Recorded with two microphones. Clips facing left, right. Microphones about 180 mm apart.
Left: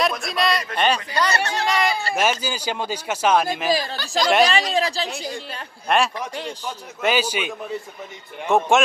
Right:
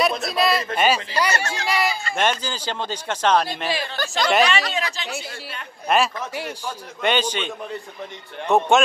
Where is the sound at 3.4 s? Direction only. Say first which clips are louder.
Left 4 dB; 40° left (ahead or behind).